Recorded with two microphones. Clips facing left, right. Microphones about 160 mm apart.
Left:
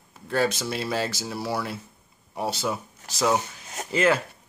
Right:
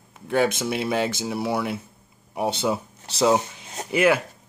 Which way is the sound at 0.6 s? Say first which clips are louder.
Right 4 dB; 20° right (ahead or behind).